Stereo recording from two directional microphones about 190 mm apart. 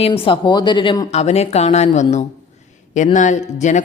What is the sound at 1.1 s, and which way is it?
Speech, 35° left (ahead or behind).